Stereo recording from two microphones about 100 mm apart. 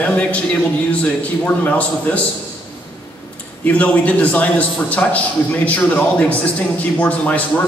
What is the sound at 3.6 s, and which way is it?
Speech, 15° left (ahead or behind).